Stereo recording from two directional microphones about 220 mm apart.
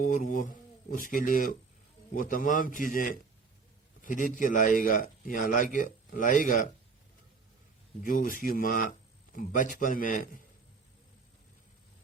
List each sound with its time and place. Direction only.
0.0 s a man's voice: 40° left (ahead or behind)
8.0 s a man's voice: 40° left (ahead or behind)